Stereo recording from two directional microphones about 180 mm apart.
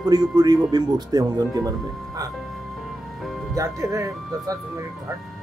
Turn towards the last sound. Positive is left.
turn(degrees=-15)  # may be behind; listen again after turning